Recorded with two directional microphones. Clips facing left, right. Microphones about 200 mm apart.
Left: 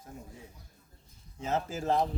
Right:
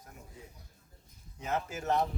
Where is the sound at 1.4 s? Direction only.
30° left (ahead or behind).